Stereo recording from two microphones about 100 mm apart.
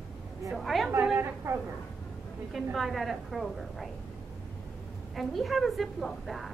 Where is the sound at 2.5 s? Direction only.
Centre (ahead or behind).